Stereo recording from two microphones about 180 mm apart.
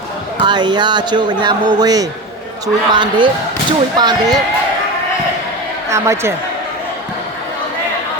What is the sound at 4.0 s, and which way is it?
Speech, 25° right (ahead or behind).